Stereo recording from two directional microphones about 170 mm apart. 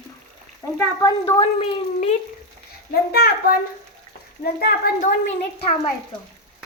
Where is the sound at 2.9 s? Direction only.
65° left (ahead or behind).